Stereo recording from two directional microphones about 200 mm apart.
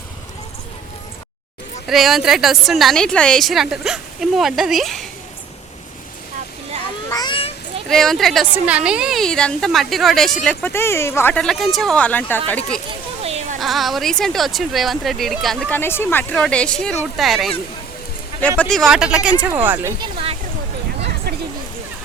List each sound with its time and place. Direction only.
1.9 s a woman's voice: centre (ahead or behind)
7.1 s children playing: 20° left (ahead or behind)
7.9 s a woman's voice: centre (ahead or behind)
13.2 s a sound: 30° right (ahead or behind)
13.6 s a woman's voice: centre (ahead or behind)